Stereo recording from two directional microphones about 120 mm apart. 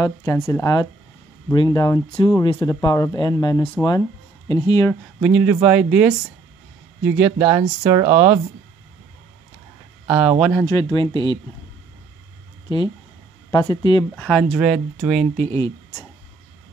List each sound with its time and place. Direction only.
0.0 s speech: 30° left (ahead or behind)
5.2 s speech: 10° right (ahead or behind)
10.0 s speech: 10° right (ahead or behind)
10.7 s speech: 30° left (ahead or behind)
12.6 s speech: 40° left (ahead or behind)
14.2 s speech: 5° left (ahead or behind)
14.6 s speech: 5° right (ahead or behind)
15.3 s speech: 15° left (ahead or behind)